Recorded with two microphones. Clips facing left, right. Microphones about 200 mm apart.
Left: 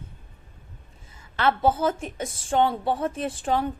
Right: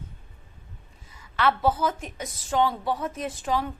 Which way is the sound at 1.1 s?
25° left (ahead or behind).